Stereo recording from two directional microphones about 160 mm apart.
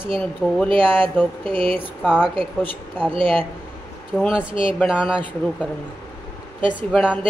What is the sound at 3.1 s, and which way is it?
Speech, 35° right (ahead or behind).